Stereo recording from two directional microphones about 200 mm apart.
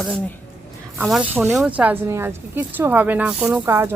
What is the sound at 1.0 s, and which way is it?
Speech, 5° right (ahead or behind).